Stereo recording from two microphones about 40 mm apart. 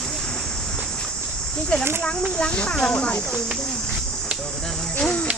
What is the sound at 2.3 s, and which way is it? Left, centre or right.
Speech, left.